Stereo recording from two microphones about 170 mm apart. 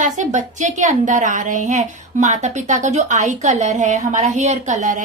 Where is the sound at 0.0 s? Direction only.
45° right (ahead or behind).